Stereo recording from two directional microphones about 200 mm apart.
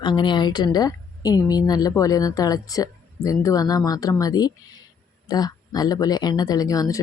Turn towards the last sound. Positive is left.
turn(degrees=15)  # may be behind; listen again after turning